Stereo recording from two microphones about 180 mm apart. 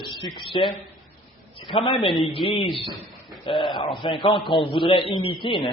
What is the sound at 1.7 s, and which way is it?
A man's voice, 30° left (ahead or behind).